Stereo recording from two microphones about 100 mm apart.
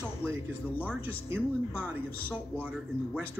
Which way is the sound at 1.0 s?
20° right (ahead or behind).